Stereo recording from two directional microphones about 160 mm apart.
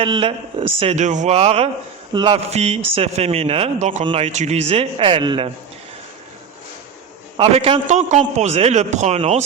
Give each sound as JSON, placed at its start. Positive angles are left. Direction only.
{"t": 0.0, "sound": "speech", "side_deg": -35}
{"t": 2.1, "sound": "speech", "side_deg": -30}
{"t": 7.3, "sound": "a man's voice", "side_deg": -35}